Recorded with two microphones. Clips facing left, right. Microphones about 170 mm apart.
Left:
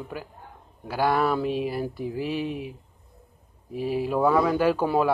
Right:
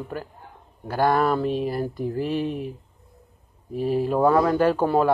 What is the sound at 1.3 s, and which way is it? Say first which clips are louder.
Speech: right 2 dB; 5° left (ahead or behind).